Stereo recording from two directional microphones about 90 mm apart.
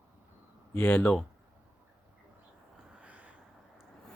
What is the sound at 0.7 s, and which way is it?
Speech, 20° left (ahead or behind).